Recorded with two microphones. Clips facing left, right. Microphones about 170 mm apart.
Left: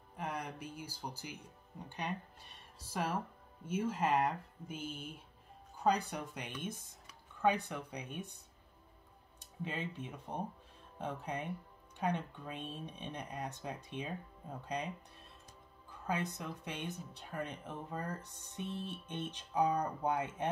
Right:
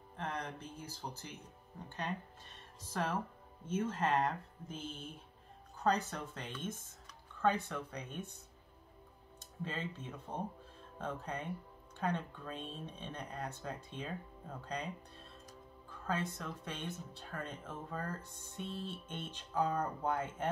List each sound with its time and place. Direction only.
0.1 s speech: 10° left (ahead or behind)
9.6 s speech: 15° left (ahead or behind)
15.9 s speech: 15° left (ahead or behind)